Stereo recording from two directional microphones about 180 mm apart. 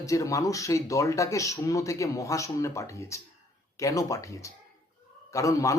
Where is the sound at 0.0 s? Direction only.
20° left (ahead or behind).